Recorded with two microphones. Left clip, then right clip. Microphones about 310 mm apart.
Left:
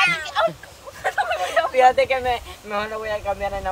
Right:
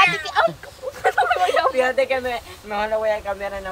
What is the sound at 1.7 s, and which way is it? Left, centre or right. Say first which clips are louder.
Speech: left 3 dB; centre.